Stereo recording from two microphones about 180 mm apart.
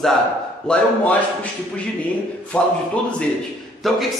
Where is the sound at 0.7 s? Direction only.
10° left (ahead or behind).